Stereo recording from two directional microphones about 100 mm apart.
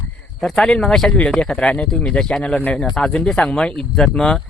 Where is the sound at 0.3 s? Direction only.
5° left (ahead or behind).